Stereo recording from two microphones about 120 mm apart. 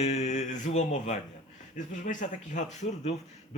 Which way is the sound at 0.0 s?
65° left (ahead or behind).